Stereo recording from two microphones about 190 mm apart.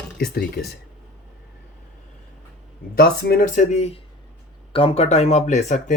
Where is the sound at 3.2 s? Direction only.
50° left (ahead or behind).